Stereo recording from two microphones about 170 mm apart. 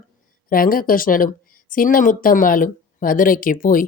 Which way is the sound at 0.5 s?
55° left (ahead or behind).